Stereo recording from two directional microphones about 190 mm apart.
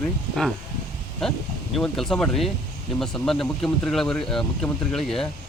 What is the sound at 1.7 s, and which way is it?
Speech, centre (ahead or behind).